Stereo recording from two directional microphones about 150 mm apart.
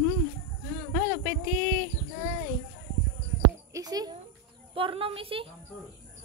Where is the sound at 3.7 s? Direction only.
25° right (ahead or behind).